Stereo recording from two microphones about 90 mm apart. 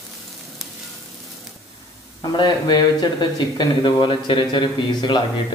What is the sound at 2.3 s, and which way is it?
Speech, 55° left (ahead or behind).